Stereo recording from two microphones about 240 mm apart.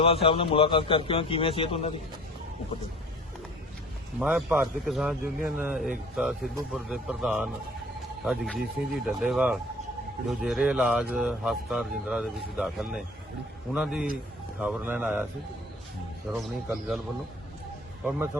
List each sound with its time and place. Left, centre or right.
0.0 s a man's voice: left
4.2 s speech: centre
16.3 s speech: centre